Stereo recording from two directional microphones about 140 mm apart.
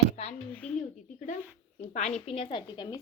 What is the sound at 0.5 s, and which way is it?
Speech, 10° left (ahead or behind).